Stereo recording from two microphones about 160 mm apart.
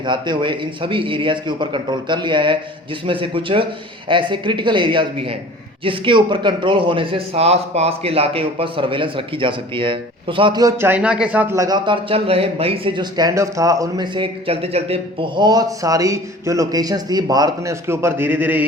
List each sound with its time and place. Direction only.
0.0 s a man's voice: 30° right (ahead or behind); by 18.6 s 10° right (ahead or behind)